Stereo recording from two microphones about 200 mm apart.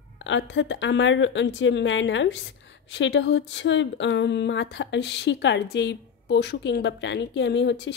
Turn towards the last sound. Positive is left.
turn(degrees=60)  # may be behind; listen again after turning